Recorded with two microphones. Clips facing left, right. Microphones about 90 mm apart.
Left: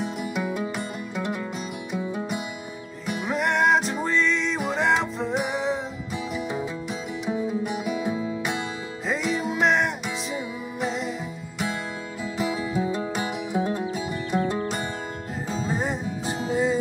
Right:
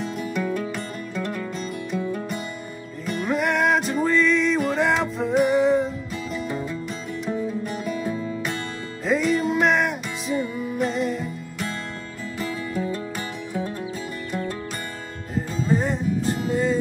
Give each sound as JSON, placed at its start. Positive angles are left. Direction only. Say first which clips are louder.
{"t": 0.0, "sound": "music", "louder": "right 1 dB", "side_deg": 5}
{"t": 7.2, "sound": "music", "louder": "left 1 dB", "side_deg": 5}
{"t": 12.4, "sound": "music", "louder": "left 2 dB", "side_deg": 10}
{"t": 15.6, "sound": "music", "louder": "right 5 dB", "side_deg": 5}